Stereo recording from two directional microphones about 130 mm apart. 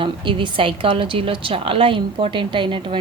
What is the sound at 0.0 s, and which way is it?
A woman's voice, 40° right (ahead or behind).